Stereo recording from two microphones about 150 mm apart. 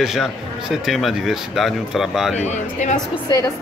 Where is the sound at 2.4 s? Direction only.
50° left (ahead or behind).